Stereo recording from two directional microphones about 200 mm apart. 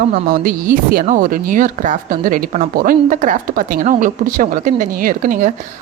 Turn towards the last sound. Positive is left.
turn(degrees=-45)  # may be behind; listen again after turning